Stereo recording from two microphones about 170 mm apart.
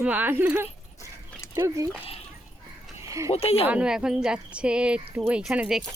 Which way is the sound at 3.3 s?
35° left (ahead or behind).